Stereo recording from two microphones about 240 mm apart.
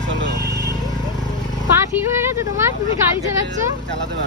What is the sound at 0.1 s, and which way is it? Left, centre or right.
Vehicle, right.